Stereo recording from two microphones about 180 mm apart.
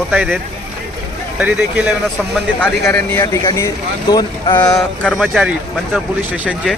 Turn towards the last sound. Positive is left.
turn(degrees=-5)  # may be behind; listen again after turning